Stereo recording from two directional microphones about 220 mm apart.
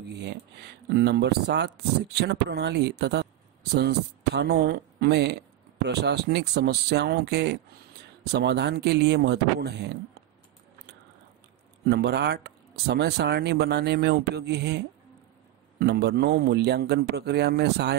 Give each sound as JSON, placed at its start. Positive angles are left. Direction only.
{"t": 0.1, "sound": "speech", "side_deg": -50}
{"t": 11.8, "sound": "speech", "side_deg": -45}
{"t": 15.8, "sound": "speech", "side_deg": -50}